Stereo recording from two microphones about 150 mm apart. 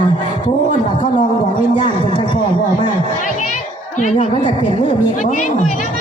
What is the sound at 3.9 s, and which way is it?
Speech, 55° left (ahead or behind).